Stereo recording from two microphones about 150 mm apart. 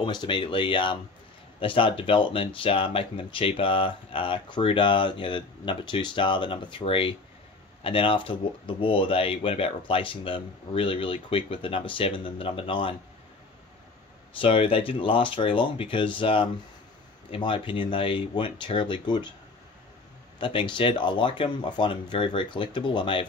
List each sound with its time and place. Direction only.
0.0 s speech: 30° left (ahead or behind)
14.4 s speech: 35° left (ahead or behind)
20.3 s speech: 30° left (ahead or behind)